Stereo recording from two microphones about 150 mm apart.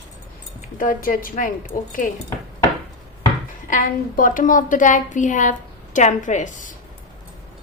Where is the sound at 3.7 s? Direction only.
60° left (ahead or behind).